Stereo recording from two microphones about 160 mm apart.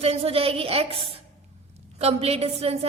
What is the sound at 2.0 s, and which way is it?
Speech, 40° right (ahead or behind).